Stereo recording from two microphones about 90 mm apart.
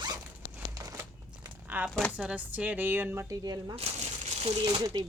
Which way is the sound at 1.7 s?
20° right (ahead or behind).